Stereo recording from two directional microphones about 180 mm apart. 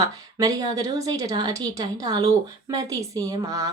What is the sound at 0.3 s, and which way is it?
A woman's voice, 20° right (ahead or behind).